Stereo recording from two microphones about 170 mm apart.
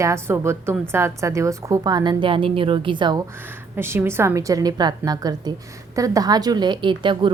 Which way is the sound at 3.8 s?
15° right (ahead or behind).